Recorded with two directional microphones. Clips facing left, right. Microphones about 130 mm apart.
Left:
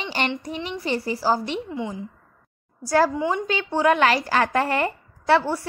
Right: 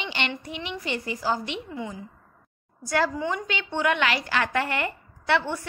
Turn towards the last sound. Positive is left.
turn(degrees=35)  # may be behind; listen again after turning